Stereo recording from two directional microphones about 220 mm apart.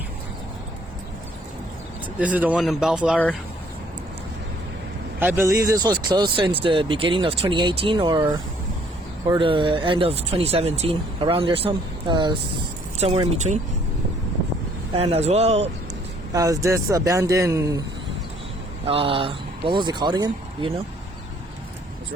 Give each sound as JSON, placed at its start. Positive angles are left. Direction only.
{"t": 2.1, "sound": "speech", "side_deg": -5}
{"t": 5.2, "sound": "speech", "side_deg": -10}
{"t": 14.9, "sound": "speech", "side_deg": -25}
{"t": 16.3, "sound": "speech", "side_deg": -15}
{"t": 18.9, "sound": "speech", "side_deg": -25}